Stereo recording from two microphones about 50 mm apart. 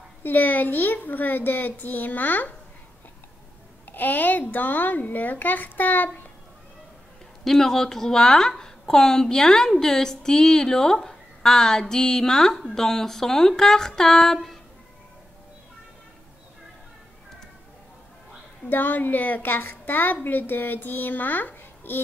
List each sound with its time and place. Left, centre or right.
0.2 s a child's voice: left
3.9 s a child's voice: left
7.4 s a woman's voice: centre
18.7 s a child's voice: left